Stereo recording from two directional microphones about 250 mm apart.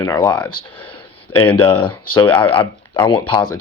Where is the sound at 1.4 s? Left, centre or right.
Centre.